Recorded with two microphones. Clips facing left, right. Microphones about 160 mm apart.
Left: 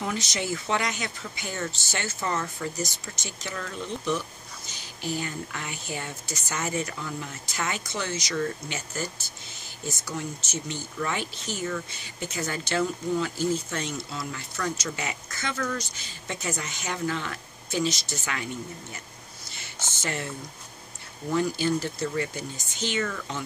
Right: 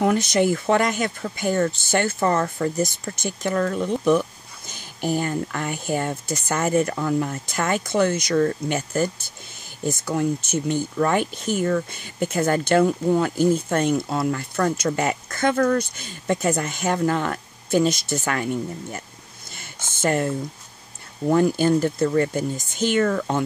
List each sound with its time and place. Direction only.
0.0 s speech: 55° right (ahead or behind)
19.5 s a sound: 50° right (ahead or behind)
21.3 s speech: 50° right (ahead or behind)